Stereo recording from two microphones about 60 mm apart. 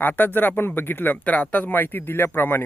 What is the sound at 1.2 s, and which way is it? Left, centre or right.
Speech, left.